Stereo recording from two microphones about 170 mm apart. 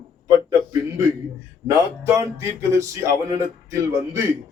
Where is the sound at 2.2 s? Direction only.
15° right (ahead or behind).